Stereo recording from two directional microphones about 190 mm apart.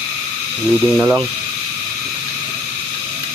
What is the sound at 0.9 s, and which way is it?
Speech, 5° right (ahead or behind).